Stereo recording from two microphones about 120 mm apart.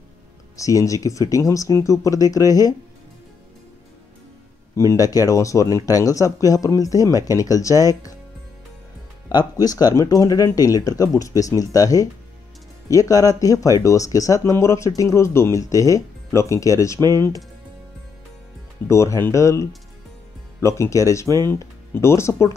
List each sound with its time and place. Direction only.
0.6 s speech: 25° left (ahead or behind)
4.7 s speech: 25° left (ahead or behind)
9.3 s speech: 35° left (ahead or behind)
18.9 s speech: 25° left (ahead or behind)